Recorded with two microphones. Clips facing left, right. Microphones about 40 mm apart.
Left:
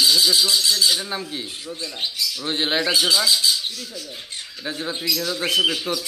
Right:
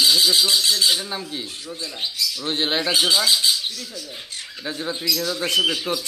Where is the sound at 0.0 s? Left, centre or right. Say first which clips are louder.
Even; centre.